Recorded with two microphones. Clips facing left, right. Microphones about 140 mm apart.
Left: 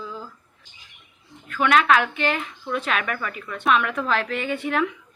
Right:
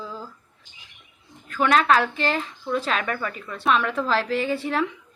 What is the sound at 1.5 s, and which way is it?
A woman's voice, 35° right (ahead or behind).